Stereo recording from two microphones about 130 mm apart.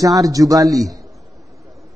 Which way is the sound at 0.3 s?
25° right (ahead or behind).